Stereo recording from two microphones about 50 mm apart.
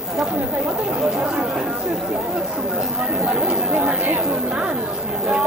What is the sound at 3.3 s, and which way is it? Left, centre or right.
Chatter, right.